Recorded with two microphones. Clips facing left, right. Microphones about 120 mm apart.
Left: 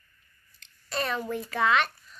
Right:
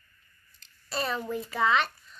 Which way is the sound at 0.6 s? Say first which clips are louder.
Left 1 dB; 5° right (ahead or behind).